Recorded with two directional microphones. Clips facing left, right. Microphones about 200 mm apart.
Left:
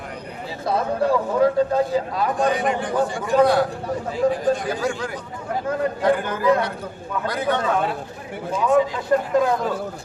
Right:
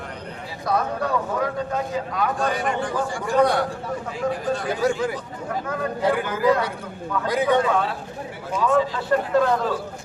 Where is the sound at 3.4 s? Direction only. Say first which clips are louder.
Left 3 dB; 5° left (ahead or behind).